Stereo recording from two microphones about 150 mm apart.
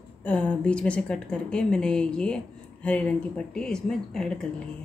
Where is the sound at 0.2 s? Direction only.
10° left (ahead or behind).